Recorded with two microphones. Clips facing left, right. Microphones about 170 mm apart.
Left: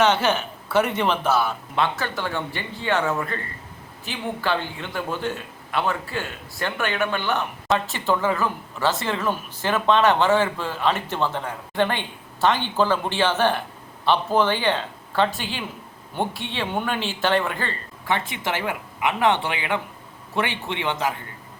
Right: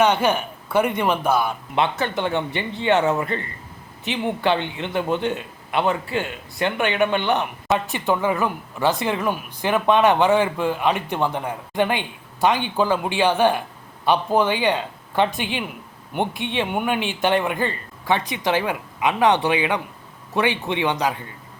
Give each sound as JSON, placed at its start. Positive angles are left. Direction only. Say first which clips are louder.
{"t": 0.0, "sound": "speech", "louder": "right 1 dB", "side_deg": -10}